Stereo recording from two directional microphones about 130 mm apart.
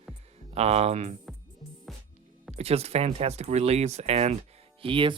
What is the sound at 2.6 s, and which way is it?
Speech, 55° right (ahead or behind).